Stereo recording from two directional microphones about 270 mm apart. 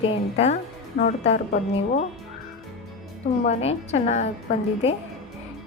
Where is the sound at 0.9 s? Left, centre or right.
Left.